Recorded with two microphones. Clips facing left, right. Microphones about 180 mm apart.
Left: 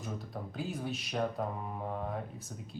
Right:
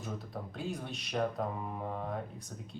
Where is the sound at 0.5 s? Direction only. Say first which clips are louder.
Left 3 dB; centre (ahead or behind).